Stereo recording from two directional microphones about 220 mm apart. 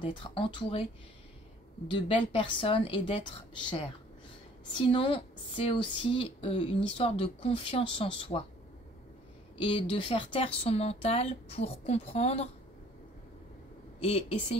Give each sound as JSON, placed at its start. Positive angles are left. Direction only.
{"t": 0.0, "sound": "speech", "side_deg": 20}
{"t": 1.9, "sound": "speech", "side_deg": 25}
{"t": 9.6, "sound": "speech", "side_deg": 25}
{"t": 14.0, "sound": "speech", "side_deg": 30}